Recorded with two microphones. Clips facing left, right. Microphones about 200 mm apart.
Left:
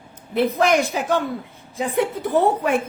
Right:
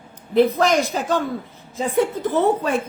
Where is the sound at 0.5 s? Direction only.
15° left (ahead or behind).